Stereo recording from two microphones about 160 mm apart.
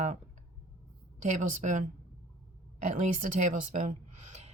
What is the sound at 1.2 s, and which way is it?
Speech, 50° right (ahead or behind).